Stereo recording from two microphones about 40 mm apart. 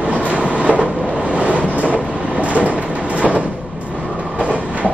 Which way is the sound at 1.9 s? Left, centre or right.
Right.